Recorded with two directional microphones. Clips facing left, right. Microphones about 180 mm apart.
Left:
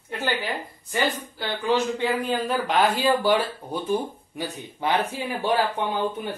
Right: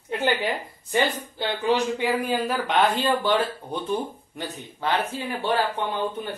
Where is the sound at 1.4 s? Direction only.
20° right (ahead or behind); by 5.9 s 15° left (ahead or behind).